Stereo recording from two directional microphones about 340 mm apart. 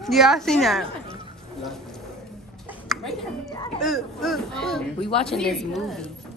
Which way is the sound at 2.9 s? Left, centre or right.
Centre.